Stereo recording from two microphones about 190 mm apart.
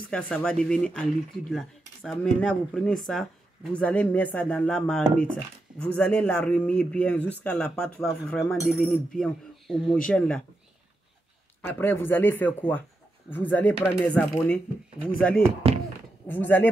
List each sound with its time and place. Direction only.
0.1 s speech: 5° left (ahead or behind)
11.6 s speech: 10° left (ahead or behind)
15.7 s a sound: 30° right (ahead or behind)
16.3 s speech: 10° left (ahead or behind)